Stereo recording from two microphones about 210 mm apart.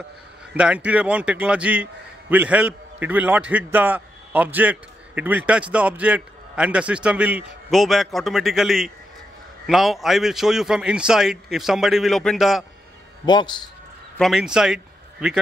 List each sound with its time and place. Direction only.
0.6 s a man's voice: 5° right (ahead or behind)
13.2 s speech: 20° left (ahead or behind)
14.1 s speech: centre (ahead or behind)